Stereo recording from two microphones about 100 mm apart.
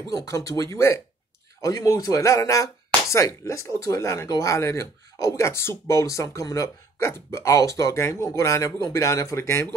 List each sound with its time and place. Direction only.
0.1 s speech: 35° left (ahead or behind)